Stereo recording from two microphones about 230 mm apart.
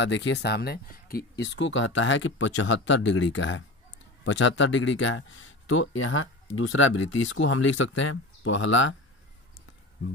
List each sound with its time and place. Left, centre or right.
0.0 s speech: left
1.4 s speech: left